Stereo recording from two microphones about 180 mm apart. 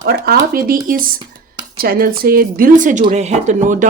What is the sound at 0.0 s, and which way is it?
Speech, 60° right (ahead or behind).